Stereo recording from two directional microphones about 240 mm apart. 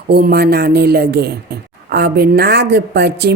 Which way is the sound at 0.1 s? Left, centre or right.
Right.